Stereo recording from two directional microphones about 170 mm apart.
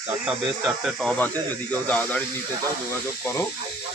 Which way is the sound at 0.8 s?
5° left (ahead or behind).